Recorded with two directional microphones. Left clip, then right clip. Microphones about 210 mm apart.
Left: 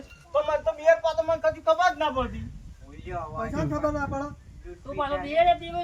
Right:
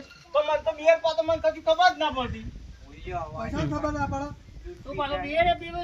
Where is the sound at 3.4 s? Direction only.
Centre (ahead or behind).